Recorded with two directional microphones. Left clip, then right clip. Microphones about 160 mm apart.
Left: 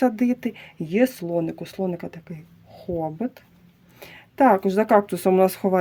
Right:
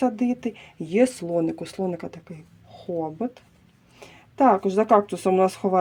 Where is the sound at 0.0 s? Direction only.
30° left (ahead or behind).